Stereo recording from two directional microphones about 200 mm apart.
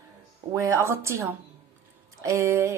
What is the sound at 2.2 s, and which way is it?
Speech, 15° right (ahead or behind).